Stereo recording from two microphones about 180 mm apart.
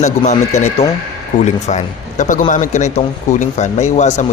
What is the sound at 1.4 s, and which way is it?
A man's voice, 40° left (ahead or behind).